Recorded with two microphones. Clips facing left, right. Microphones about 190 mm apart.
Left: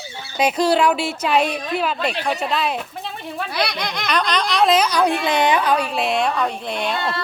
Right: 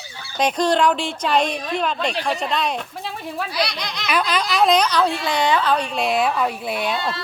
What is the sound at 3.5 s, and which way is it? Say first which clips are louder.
Speech: left 4 dB; 55° left (ahead or behind).